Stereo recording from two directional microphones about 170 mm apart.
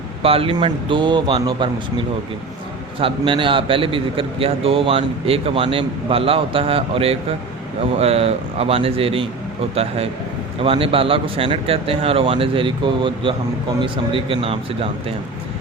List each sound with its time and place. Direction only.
0.2 s a man's voice: 35° right (ahead or behind)
10.6 s a man's voice: 30° right (ahead or behind)